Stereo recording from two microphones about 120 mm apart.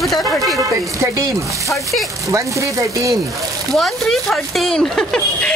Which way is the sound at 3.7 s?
Centre (ahead or behind).